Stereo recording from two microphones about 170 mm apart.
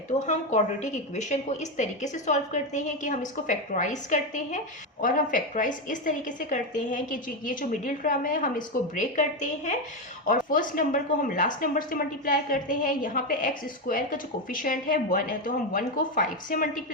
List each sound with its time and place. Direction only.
0.3 s a woman's voice: 45° left (ahead or behind)